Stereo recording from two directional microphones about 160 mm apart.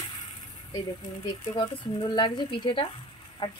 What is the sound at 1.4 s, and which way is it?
A woman's voice, 25° left (ahead or behind).